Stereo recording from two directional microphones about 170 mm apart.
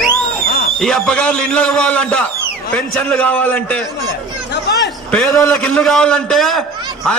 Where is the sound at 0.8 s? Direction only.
5° left (ahead or behind).